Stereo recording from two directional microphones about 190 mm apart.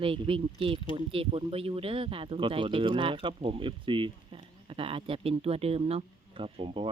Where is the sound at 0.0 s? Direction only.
30° right (ahead or behind).